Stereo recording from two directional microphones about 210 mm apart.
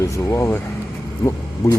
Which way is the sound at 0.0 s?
15° left (ahead or behind).